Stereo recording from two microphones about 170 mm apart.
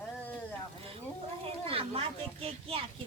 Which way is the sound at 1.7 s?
35° right (ahead or behind).